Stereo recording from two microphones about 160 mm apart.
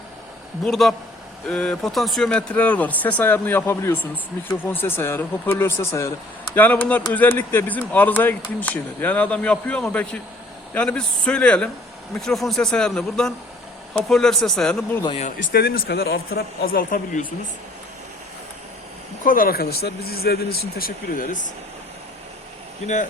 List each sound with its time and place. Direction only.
0.6 s speech: centre (ahead or behind)
15.0 s speech: 35° left (ahead or behind)
15.4 s speech: 65° left (ahead or behind)
19.2 s speech: 60° left (ahead or behind)